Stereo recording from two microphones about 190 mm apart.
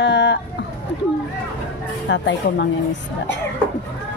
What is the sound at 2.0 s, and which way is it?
Speech, 70° left (ahead or behind).